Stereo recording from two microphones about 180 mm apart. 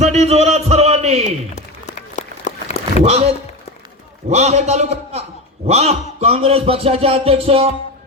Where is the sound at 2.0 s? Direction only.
40° left (ahead or behind).